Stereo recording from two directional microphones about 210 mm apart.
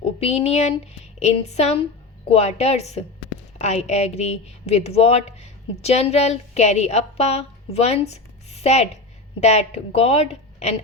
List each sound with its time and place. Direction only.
0.2 s speech: 30° left (ahead or behind)